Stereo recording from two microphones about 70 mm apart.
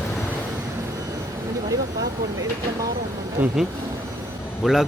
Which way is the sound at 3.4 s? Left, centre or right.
Right.